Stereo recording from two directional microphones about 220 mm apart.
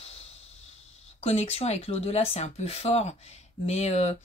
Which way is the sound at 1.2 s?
25° left (ahead or behind).